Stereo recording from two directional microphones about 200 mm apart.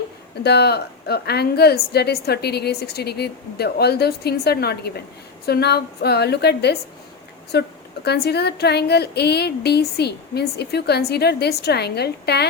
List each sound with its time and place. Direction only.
0.4 s a woman's voice: 55° left (ahead or behind)